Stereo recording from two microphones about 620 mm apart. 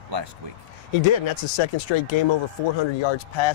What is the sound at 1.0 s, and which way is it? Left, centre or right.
Speech, left.